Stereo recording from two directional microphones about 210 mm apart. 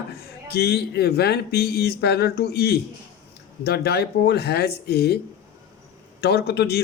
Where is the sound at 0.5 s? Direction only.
50° left (ahead or behind).